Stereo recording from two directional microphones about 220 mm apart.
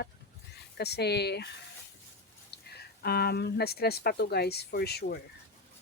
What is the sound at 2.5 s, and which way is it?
Speech, 45° left (ahead or behind).